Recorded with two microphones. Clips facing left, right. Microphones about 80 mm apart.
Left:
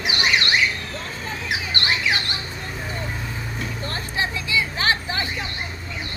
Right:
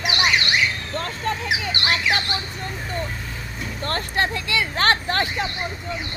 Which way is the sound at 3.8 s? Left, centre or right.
Right.